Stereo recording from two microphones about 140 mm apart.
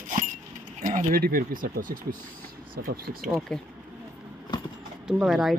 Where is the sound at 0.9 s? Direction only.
90° right.